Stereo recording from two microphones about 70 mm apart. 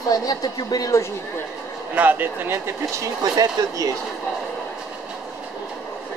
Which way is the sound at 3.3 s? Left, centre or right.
Right.